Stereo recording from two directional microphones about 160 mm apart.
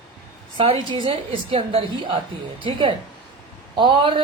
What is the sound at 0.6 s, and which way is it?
A woman's voice, 35° right (ahead or behind).